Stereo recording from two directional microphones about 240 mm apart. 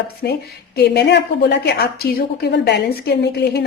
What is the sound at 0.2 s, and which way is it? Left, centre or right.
A woman's voice, left.